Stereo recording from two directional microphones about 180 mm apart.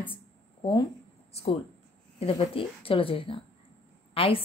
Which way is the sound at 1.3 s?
30° left (ahead or behind).